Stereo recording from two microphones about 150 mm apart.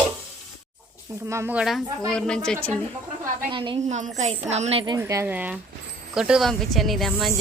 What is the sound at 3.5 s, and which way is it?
Speech, 35° right (ahead or behind).